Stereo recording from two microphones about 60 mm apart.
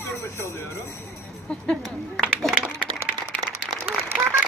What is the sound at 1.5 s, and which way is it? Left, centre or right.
Speech, centre.